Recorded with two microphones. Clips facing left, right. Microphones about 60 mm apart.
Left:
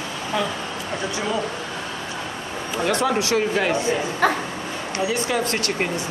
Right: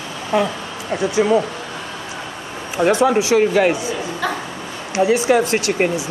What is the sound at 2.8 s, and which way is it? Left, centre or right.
Speech, centre.